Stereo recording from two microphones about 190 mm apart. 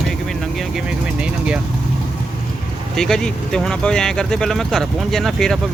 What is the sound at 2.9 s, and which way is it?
Speech, centre (ahead or behind).